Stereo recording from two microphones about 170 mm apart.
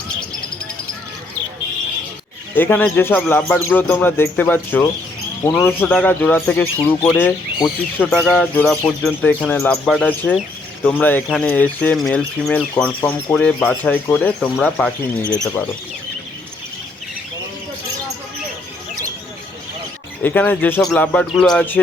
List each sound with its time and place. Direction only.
2.6 s speech: 10° left (ahead or behind)
20.2 s speech: 10° left (ahead or behind)